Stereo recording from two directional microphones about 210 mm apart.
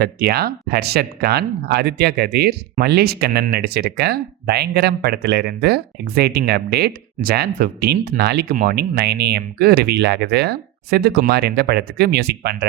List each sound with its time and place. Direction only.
0.0 s speech: 50° right (ahead or behind)